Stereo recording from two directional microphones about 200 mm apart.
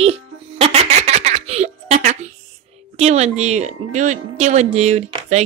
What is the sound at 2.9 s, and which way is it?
A woman's voice, 35° right (ahead or behind).